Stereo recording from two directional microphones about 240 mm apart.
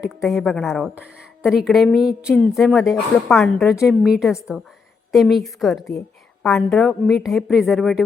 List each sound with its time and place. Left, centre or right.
0.2 s a woman's voice: centre